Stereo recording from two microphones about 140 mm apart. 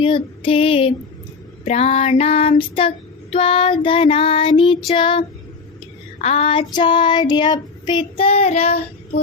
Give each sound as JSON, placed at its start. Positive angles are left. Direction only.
{"t": 0.0, "sound": "female singing", "side_deg": 40}
{"t": 1.6, "sound": "child singing", "side_deg": 55}
{"t": 6.2, "sound": "child singing", "side_deg": 45}
{"t": 8.2, "sound": "child singing", "side_deg": 45}